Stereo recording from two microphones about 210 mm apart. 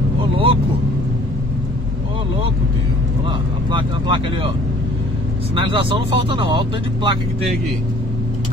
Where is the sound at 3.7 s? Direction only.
25° right (ahead or behind).